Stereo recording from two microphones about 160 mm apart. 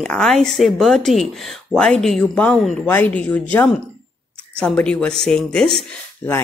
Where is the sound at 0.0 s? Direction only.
5° left (ahead or behind).